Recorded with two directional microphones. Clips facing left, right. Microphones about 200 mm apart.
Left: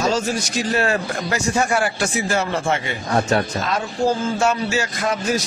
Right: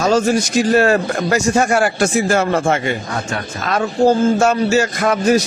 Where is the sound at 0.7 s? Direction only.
45° right (ahead or behind).